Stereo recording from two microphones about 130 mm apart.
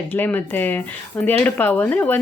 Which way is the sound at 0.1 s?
15° left (ahead or behind).